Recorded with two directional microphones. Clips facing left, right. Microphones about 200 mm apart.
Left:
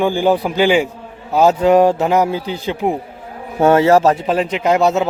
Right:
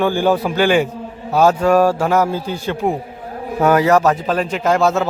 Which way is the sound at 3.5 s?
25° left (ahead or behind).